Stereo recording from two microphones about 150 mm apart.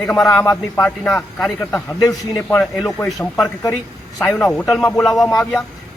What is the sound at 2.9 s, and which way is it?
A man's voice, 15° left (ahead or behind).